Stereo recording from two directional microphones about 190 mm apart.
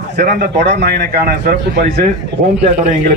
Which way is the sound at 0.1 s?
60° right (ahead or behind).